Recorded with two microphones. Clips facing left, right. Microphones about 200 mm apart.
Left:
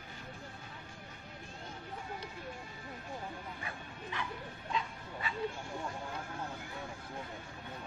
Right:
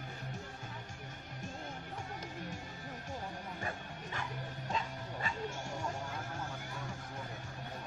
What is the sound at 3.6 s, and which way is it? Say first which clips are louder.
Bow-wow: right 3 dB; 45° right (ahead or behind).